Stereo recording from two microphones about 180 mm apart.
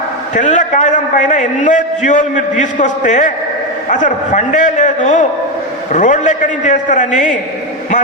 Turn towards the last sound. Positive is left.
turn(degrees=45)  # may be behind; listen again after turning